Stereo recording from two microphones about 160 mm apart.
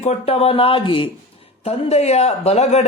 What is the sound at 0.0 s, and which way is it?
Speech, 40° left (ahead or behind).